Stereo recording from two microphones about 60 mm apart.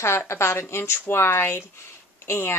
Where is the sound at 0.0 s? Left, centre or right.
Left.